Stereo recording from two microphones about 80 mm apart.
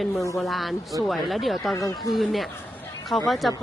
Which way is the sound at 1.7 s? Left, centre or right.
Left.